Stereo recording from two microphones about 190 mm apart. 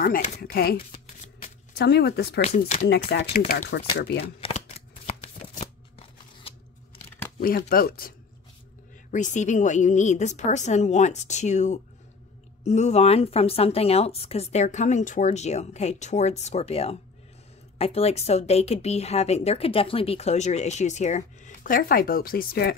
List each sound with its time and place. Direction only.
0.0 s a woman's voice: 45° left (ahead or behind)
0.9 s shuffling cards: 40° left (ahead or behind)
1.8 s speech: 60° left (ahead or behind)
2.4 s speech: 35° left (ahead or behind)
3.1 s speech: 55° left (ahead or behind)
4.4 s shuffling cards: 35° left (ahead or behind)
7.4 s a woman's voice: 50° left (ahead or behind)
9.1 s speech: 40° left (ahead or behind)